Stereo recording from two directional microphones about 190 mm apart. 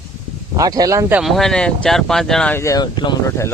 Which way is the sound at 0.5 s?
20° right (ahead or behind).